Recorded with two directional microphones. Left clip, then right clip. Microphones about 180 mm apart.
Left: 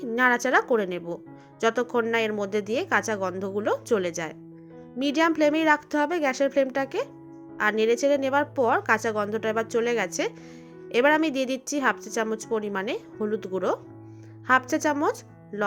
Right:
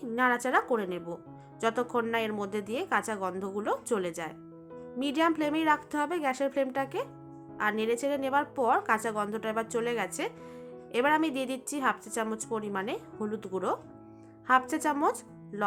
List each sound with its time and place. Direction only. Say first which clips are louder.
0.0 s a woman's voice: left 5 dB; 25° left (ahead or behind)